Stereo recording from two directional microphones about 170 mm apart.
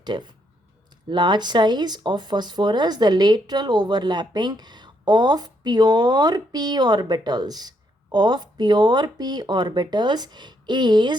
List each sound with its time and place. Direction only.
0.0 s speech: 25° right (ahead or behind)